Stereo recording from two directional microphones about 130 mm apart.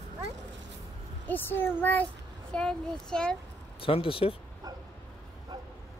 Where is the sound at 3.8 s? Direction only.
45° left (ahead or behind).